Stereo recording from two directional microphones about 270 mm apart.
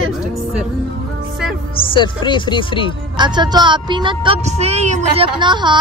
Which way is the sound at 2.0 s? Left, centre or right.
Centre.